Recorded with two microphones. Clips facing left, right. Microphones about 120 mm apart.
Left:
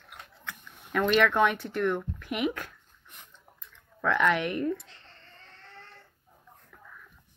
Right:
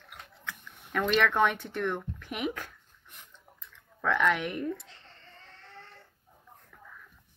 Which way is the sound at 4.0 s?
Centre (ahead or behind).